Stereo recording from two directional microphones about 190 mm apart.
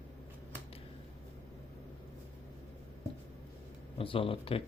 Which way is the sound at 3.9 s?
30° left (ahead or behind).